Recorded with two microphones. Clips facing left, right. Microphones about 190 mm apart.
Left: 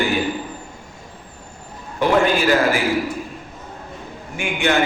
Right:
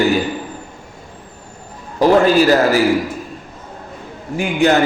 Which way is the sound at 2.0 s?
35° right (ahead or behind).